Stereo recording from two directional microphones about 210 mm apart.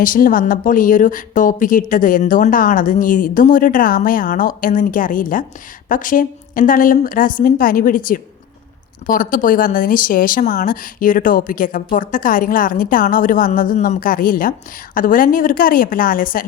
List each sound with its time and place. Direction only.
0.0 s a woman's voice: 40° left (ahead or behind)